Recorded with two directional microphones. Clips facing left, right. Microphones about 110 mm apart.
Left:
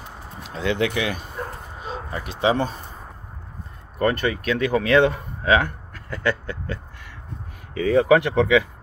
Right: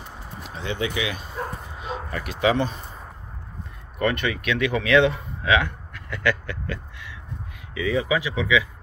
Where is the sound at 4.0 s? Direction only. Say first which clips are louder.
Left 2 dB; 35° left (ahead or behind).